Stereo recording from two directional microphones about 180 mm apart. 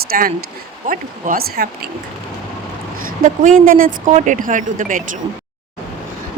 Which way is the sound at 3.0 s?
50° right (ahead or behind).